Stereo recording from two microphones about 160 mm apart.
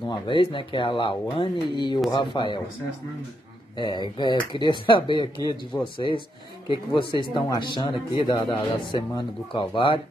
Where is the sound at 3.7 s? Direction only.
30° left (ahead or behind).